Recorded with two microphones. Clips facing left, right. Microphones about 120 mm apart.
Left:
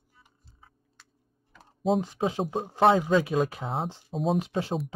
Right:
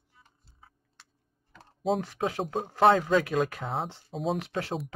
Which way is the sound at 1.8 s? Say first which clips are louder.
Left 2 dB; centre (ahead or behind).